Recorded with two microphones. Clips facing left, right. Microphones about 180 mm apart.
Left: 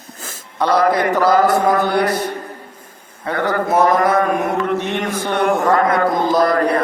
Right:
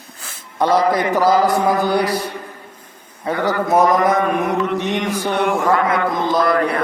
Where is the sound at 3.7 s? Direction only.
15° right (ahead or behind).